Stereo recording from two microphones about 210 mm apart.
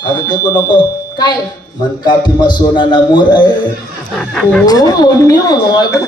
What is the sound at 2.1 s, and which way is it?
Speech, 20° left (ahead or behind).